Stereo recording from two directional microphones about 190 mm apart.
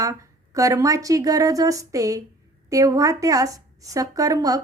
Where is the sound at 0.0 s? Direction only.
15° right (ahead or behind).